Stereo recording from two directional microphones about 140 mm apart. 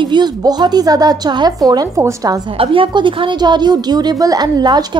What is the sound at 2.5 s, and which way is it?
A woman's voice, 40° right (ahead or behind).